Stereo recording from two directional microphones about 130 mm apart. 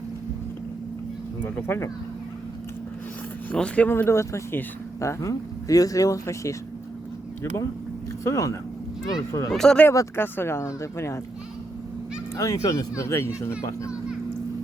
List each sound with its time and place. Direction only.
1.4 s speech: 15° left (ahead or behind)
3.5 s speech: 10° left (ahead or behind)
8.2 s speech: 25° left (ahead or behind)
9.5 s speech: 5° left (ahead or behind)
9.8 s speech: 20° left (ahead or behind)
12.4 s speech: 25° left (ahead or behind)